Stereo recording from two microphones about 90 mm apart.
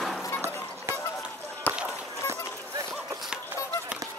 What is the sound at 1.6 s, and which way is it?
Run, 20° left (ahead or behind).